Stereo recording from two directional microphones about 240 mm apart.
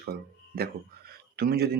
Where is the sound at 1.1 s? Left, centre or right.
Right.